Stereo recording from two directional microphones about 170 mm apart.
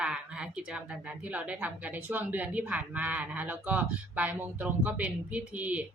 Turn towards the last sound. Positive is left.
turn(degrees=-10)  # may be behind; listen again after turning